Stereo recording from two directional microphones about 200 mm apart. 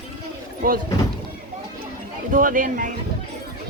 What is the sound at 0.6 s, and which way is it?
Speech, 45° right (ahead or behind).